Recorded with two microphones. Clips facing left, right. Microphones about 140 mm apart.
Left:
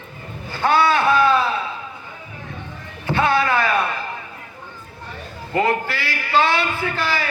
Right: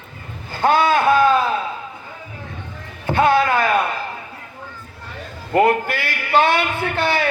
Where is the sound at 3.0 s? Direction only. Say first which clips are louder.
Right 3 dB; 50° right (ahead or behind).